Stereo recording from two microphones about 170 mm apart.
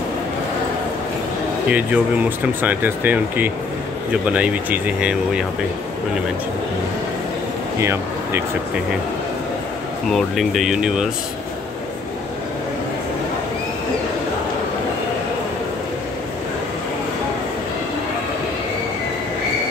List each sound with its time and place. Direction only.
1.7 s speech: 10° right (ahead or behind)
7.8 s speech: 15° right (ahead or behind)
10.1 s speech: centre (ahead or behind)